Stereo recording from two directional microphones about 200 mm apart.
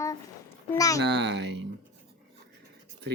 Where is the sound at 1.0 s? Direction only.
60° right (ahead or behind).